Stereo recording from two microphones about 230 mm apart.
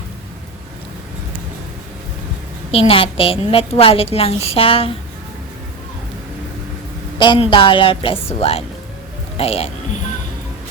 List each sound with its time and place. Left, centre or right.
2.7 s a woman's voice: left
7.2 s a woman's voice: left